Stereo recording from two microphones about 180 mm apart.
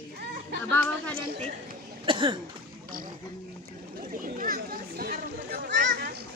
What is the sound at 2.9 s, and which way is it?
Speech, 50° right (ahead or behind).